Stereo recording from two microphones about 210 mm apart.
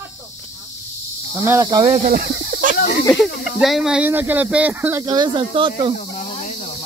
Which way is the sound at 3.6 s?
Centre (ahead or behind).